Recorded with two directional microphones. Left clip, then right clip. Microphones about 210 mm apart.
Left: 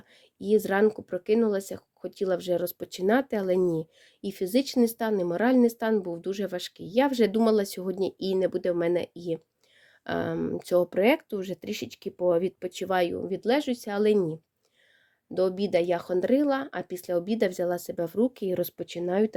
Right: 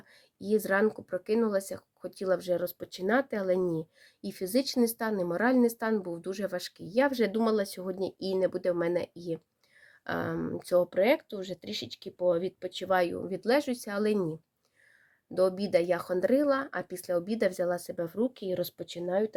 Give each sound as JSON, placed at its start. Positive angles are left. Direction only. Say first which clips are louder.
{"t": 0.3, "sound": "speech", "louder": "left 4 dB", "side_deg": 35}
{"t": 15.4, "sound": "speech", "louder": "left 1 dB", "side_deg": 30}